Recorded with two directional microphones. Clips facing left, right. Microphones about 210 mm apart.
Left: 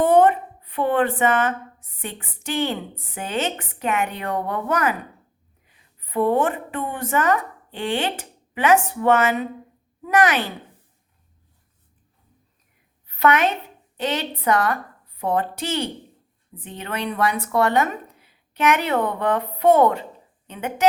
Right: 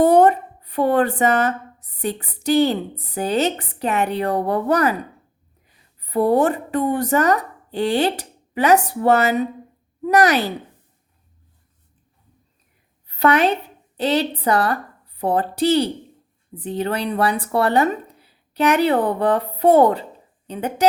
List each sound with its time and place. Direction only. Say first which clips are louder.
0.0 s a woman's voice: right 2 dB; 40° right (ahead or behind)
13.1 s a sound: right 2 dB; 35° right (ahead or behind)
13.9 s a woman's voice: right 6 dB; 35° right (ahead or behind)